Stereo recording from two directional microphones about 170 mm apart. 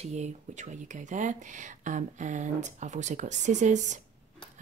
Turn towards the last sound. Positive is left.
turn(degrees=-45)  # may be behind; listen again after turning